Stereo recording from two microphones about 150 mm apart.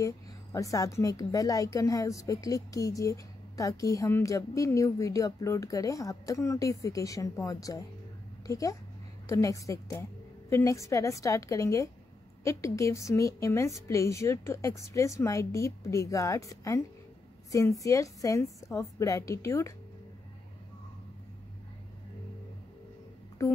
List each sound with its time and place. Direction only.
0.0 s a woman's voice: 20° left (ahead or behind)